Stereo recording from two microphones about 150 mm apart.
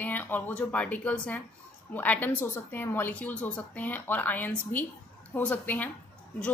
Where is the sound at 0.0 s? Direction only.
10° left (ahead or behind).